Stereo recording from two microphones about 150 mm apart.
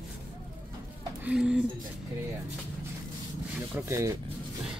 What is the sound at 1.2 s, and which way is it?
Speech, 5° right (ahead or behind).